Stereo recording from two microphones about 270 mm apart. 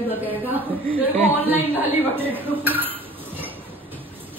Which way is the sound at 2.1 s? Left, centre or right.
Centre.